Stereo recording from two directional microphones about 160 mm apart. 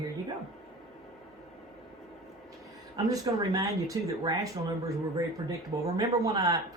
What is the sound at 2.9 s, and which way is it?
Speech, 25° right (ahead or behind).